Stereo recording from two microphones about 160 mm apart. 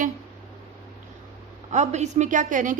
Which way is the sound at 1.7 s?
45° right (ahead or behind).